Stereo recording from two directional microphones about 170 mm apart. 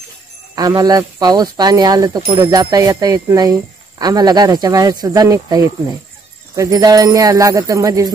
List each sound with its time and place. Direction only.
0.6 s speech: 20° right (ahead or behind)